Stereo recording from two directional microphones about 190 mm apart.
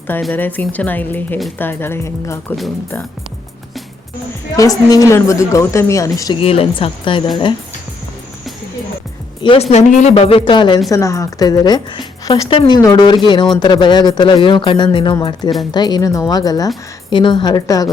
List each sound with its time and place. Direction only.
0.2 s speech: 5° left (ahead or behind)
4.5 s speech: 20° left (ahead or behind)
6.4 s a woman's voice: 30° left (ahead or behind)
9.4 s a woman's voice: 30° left (ahead or behind)